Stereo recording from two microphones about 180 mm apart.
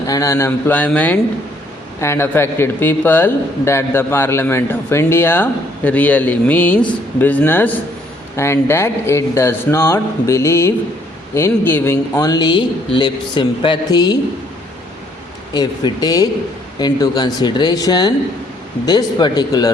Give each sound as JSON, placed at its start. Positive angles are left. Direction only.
{"t": 0.1, "sound": "speech", "side_deg": 15}
{"t": 15.5, "sound": "speech", "side_deg": 20}